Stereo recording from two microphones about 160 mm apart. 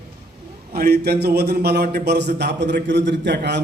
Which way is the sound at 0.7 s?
75° right (ahead or behind).